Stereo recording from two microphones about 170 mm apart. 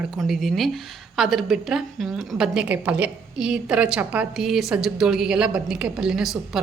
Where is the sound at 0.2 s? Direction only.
Centre (ahead or behind).